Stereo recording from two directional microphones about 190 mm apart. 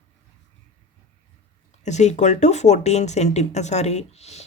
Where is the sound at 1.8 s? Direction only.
35° left (ahead or behind).